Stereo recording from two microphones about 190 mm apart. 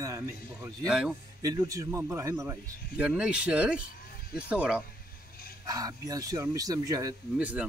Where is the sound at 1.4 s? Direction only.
20° right (ahead or behind).